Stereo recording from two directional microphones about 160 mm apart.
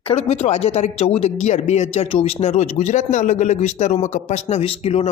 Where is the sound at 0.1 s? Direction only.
40° left (ahead or behind).